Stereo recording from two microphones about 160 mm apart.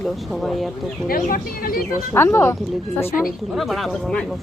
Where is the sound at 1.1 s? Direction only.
65° left (ahead or behind).